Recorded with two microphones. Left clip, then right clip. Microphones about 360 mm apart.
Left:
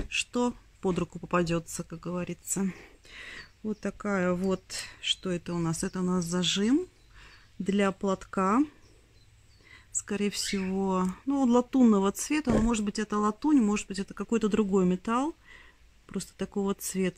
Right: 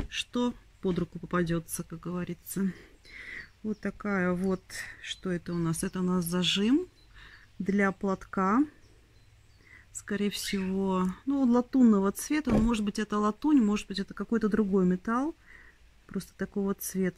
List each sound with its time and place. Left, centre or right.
0.1 s speech: centre
9.9 s speech: centre